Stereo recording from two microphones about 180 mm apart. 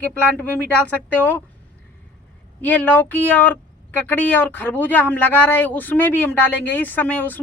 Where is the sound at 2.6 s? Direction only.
10° left (ahead or behind).